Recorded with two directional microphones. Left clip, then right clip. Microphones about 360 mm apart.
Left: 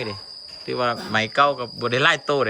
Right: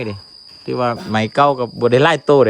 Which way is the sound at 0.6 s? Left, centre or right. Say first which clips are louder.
Right 4 dB; centre.